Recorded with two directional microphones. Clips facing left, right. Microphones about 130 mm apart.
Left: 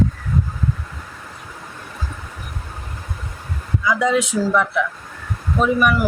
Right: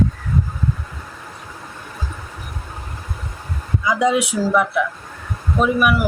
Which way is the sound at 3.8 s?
20° right (ahead or behind).